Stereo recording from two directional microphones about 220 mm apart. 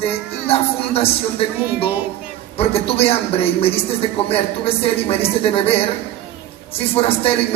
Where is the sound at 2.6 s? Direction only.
25° left (ahead or behind).